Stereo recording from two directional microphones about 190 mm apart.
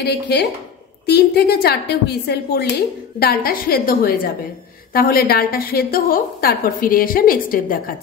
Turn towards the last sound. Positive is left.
turn(degrees=45)  # may be behind; listen again after turning